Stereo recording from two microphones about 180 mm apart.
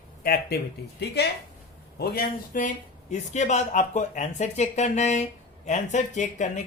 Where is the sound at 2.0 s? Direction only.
55° left (ahead or behind).